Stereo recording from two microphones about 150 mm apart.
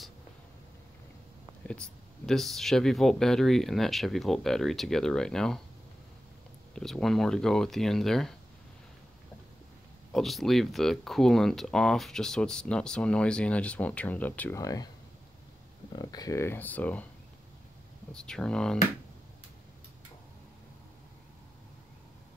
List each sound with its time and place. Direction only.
1.7 s speech: 5° left (ahead or behind)
6.7 s speech: centre (ahead or behind)
10.1 s speech: centre (ahead or behind)
14.6 s speech: 25° left (ahead or behind)
15.9 s speech: 25° left (ahead or behind); by 17.1 s 10° left (ahead or behind)
18.1 s speech: 5° left (ahead or behind)